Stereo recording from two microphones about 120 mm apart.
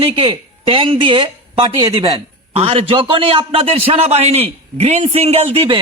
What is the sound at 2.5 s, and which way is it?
A man's voice, 55° right (ahead or behind).